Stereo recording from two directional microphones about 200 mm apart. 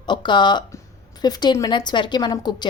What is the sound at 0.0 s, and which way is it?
A woman's voice, 25° left (ahead or behind).